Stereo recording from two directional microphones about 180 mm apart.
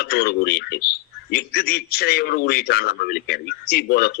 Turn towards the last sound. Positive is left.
turn(degrees=60)  # may be behind; listen again after turning